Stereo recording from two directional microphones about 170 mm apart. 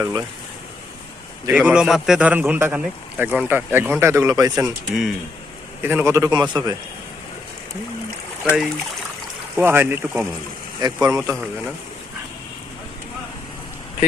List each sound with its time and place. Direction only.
0.0 s speech: 20° right (ahead or behind)
1.5 s a man's voice: 5° right (ahead or behind); by 4.6 s 20° right (ahead or behind)
4.6 s a man's voice: 5° right (ahead or behind); by 6.6 s 25° right (ahead or behind)
8.4 s a man's voice: 5° right (ahead or behind)
10.8 s speech: 25° right (ahead or behind)